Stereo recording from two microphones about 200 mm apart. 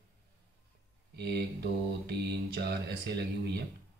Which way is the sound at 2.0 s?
55° right (ahead or behind).